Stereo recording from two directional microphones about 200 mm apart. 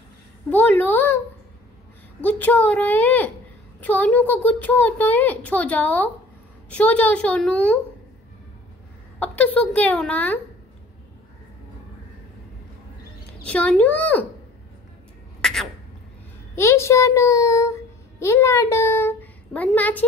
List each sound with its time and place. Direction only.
0.5 s a woman's voice: 10° left (ahead or behind)
2.2 s a child's voice: 10° left (ahead or behind)
9.2 s a child's voice: 10° left (ahead or behind)
13.4 s a child's voice: 5° left (ahead or behind)
15.4 s a sound: centre (ahead or behind)
16.5 s a child's voice: 15° left (ahead or behind)